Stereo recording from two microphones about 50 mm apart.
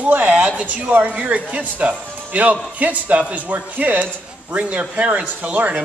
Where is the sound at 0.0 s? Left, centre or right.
Right.